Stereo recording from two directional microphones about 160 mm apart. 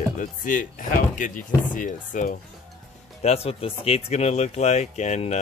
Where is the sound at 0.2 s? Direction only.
55° left (ahead or behind).